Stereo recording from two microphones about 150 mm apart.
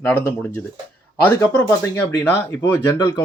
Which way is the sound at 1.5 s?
10° left (ahead or behind).